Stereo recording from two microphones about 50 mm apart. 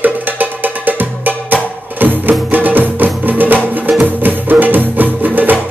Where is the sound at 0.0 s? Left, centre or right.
Right.